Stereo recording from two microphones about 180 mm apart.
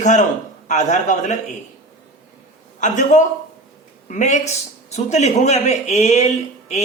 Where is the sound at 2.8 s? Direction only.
45° left (ahead or behind).